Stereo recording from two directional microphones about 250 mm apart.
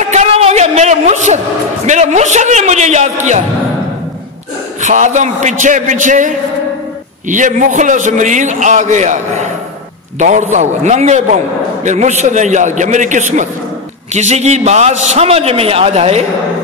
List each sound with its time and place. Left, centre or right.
0.0 s a sound: right
1.9 s a man's voice: right
4.8 s a man's voice: right